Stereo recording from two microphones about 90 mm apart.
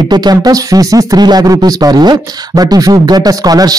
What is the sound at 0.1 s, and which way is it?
A man's voice, 50° right (ahead or behind).